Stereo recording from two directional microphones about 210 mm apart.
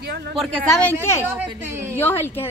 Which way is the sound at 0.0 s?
50° right (ahead or behind).